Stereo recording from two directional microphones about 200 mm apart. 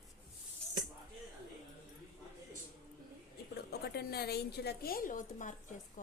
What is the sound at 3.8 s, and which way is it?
A woman's voice, 50° left (ahead or behind).